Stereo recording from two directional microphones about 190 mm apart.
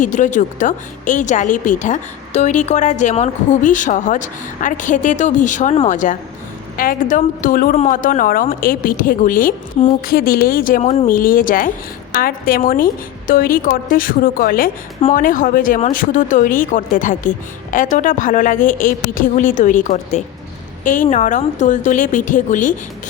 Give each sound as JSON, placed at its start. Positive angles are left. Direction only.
{"t": 0.0, "sound": "a woman's voice", "side_deg": 40}